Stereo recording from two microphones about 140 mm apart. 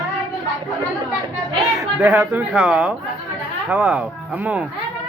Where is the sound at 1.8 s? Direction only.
15° right (ahead or behind).